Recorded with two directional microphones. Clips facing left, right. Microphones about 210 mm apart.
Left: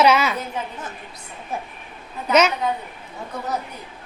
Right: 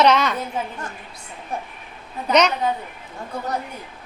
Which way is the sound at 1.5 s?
Centre (ahead or behind).